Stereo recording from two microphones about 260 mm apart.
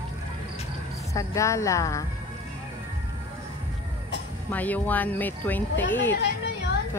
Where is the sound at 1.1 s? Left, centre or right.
Centre.